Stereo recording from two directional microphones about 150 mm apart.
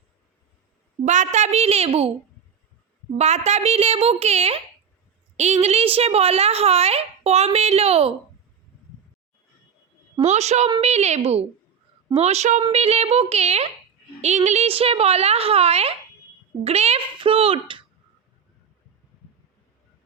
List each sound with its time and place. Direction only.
1.0 s speech: 55° right (ahead or behind)
3.2 s speech: 50° right (ahead or behind)
10.2 s a child's voice: 50° right (ahead or behind)